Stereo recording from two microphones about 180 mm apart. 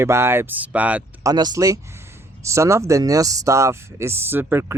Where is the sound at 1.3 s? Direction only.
20° right (ahead or behind).